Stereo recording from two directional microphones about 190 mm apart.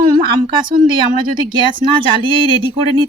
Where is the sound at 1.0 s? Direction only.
25° right (ahead or behind).